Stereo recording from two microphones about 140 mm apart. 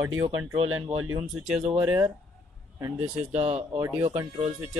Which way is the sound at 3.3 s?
50° right (ahead or behind).